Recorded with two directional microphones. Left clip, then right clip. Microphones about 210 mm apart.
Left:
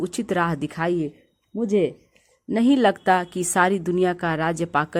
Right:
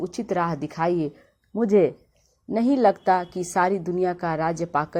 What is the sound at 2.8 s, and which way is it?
A woman's voice, 25° left (ahead or behind).